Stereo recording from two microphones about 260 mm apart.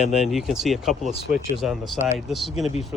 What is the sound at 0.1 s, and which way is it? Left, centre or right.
Speech, centre.